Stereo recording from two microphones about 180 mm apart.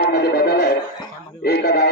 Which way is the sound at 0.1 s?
65° left (ahead or behind).